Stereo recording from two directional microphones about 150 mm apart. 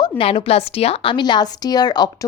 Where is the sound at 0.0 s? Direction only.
40° left (ahead or behind).